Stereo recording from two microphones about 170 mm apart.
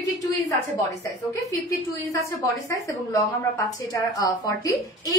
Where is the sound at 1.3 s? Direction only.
20° left (ahead or behind).